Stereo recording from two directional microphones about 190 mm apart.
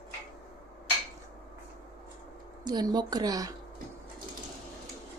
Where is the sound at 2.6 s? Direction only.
20° right (ahead or behind).